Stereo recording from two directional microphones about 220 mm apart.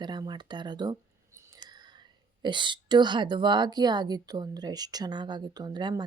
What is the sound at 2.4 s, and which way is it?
A woman's voice, 20° right (ahead or behind).